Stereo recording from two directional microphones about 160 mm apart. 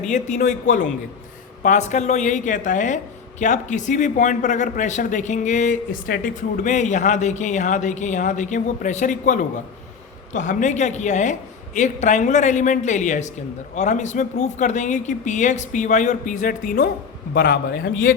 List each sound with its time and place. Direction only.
0.1 s a man's voice: 50° left (ahead or behind); by 17.9 s 75° left (ahead or behind)